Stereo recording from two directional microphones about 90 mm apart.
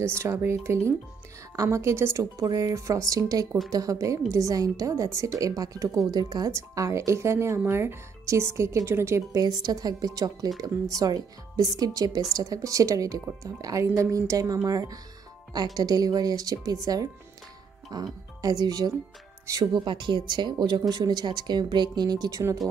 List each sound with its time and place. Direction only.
0.2 s speech: 25° right (ahead or behind); by 6.5 s 45° right (ahead or behind)
6.5 s speech: 35° right (ahead or behind)
9.4 s speech: 45° right (ahead or behind)
19.6 s speech: 55° right (ahead or behind)